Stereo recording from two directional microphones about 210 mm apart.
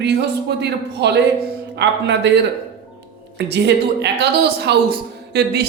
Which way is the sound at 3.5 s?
55° right (ahead or behind).